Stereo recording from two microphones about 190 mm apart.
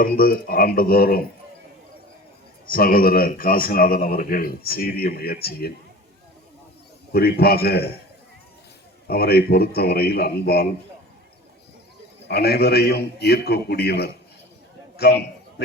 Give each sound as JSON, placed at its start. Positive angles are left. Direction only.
{"t": 0.0, "sound": "speech", "side_deg": 50}
{"t": 2.6, "sound": "speech", "side_deg": 50}
{"t": 7.1, "sound": "a man's voice", "side_deg": 55}
{"t": 9.0, "sound": "a man's voice", "side_deg": 55}
{"t": 12.3, "sound": "a man's voice", "side_deg": 55}
{"t": 14.9, "sound": "a sound", "side_deg": 60}